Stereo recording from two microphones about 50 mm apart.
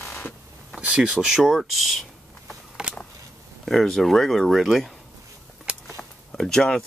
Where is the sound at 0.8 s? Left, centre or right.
Right.